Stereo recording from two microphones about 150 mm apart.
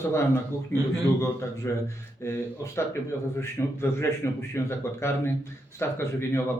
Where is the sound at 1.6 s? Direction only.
15° left (ahead or behind).